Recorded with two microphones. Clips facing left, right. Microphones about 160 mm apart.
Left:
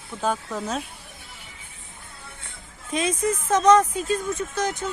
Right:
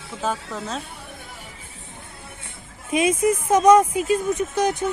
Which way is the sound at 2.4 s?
10° right (ahead or behind).